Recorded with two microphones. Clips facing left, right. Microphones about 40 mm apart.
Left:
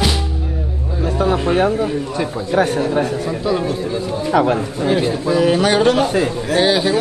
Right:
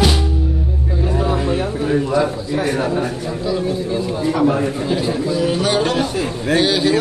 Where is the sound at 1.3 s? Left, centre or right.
Left.